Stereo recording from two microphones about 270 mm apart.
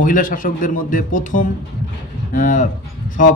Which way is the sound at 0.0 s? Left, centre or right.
Left.